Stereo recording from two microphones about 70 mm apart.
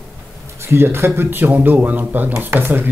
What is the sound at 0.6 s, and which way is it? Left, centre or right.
Speech, right.